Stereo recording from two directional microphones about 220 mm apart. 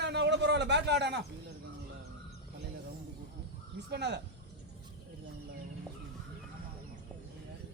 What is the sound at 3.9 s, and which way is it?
Speech, 50° right (ahead or behind).